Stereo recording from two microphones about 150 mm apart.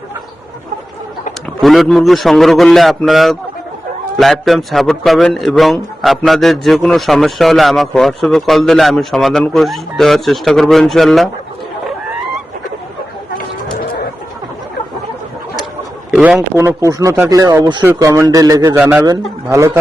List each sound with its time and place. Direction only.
1.6 s a man's voice: centre (ahead or behind)
16.1 s a man's voice: 5° right (ahead or behind)
16.6 s a man's voice: 20° right (ahead or behind)